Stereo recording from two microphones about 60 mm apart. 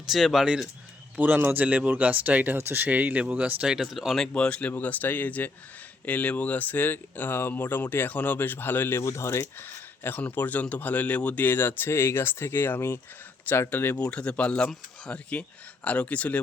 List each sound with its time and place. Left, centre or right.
0.0 s speech: centre
1.1 s speech: right
3.7 s speech: centre
4.4 s speech: centre
4.8 s speech: left
9.0 s speech: left
9.6 s a sound: left
10.2 s speech: left
14.0 s speech: centre